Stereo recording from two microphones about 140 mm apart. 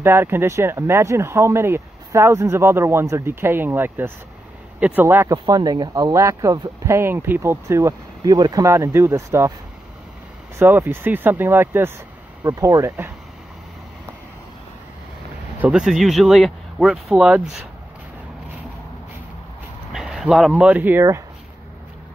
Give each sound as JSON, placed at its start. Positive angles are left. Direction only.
{"t": 0.0, "sound": "speech", "side_deg": -15}
{"t": 5.5, "sound": "speech", "side_deg": -30}
{"t": 10.6, "sound": "speech", "side_deg": -15}
{"t": 15.6, "sound": "speech", "side_deg": -5}
{"t": 19.9, "sound": "speech", "side_deg": 0}